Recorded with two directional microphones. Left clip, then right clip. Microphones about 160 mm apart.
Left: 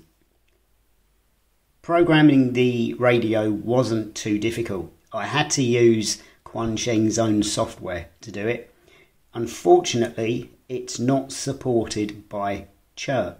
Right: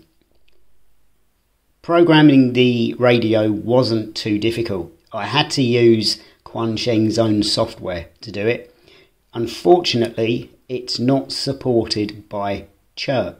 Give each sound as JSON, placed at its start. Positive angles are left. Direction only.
{"t": 1.8, "sound": "speech", "side_deg": -25}